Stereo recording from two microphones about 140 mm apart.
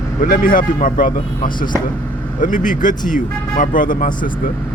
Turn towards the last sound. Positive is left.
turn(degrees=70)  # may be behind; listen again after turning